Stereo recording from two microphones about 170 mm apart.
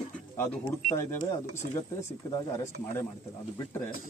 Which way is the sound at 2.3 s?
15° left (ahead or behind).